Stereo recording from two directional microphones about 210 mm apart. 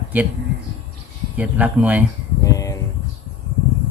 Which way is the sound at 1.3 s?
5° right (ahead or behind).